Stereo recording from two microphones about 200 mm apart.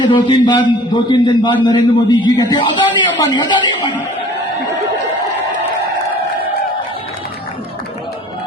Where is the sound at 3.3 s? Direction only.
25° left (ahead or behind).